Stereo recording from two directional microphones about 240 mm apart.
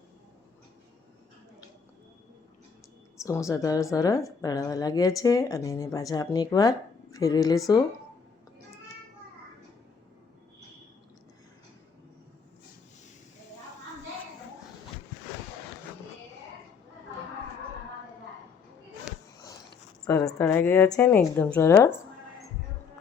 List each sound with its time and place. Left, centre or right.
3.2 s speech: centre
20.1 s speech: centre